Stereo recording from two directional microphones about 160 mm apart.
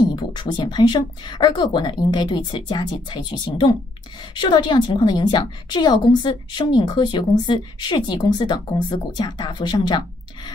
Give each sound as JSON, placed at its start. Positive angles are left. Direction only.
{"t": 0.1, "sound": "a woman's voice", "side_deg": 30}